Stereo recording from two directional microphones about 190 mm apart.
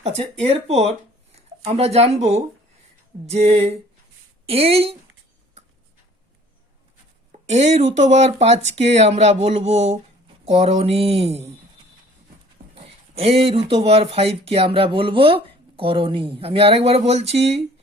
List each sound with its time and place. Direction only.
0.0 s speech: 35° right (ahead or behind)
7.4 s speech: 35° right (ahead or behind)
12.7 s speech: 30° right (ahead or behind)